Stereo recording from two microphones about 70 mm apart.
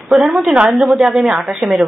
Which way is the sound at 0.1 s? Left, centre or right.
Centre.